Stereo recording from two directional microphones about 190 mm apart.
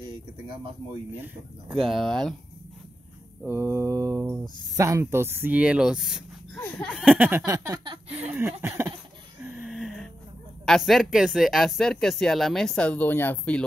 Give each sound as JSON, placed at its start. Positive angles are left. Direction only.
{"t": 1.2, "sound": "speech", "side_deg": -5}
{"t": 3.4, "sound": "speech", "side_deg": -15}
{"t": 6.6, "sound": "a sound", "side_deg": 5}
{"t": 7.1, "sound": "speech", "side_deg": -10}
{"t": 8.1, "sound": "speech", "side_deg": -10}
{"t": 9.4, "sound": "a sound", "side_deg": -10}
{"t": 10.6, "sound": "speech", "side_deg": 0}